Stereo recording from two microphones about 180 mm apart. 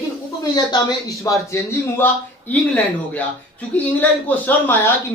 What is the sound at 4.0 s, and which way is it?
Speech, 10° left (ahead or behind).